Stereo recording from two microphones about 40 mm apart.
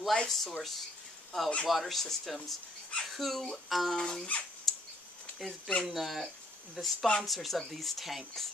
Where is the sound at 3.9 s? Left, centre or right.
Centre.